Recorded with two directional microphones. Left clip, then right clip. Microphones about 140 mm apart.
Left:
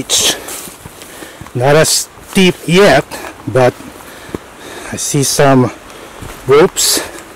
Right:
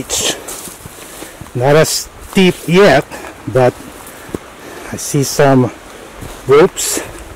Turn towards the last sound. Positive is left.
turn(degrees=25)  # may be behind; listen again after turning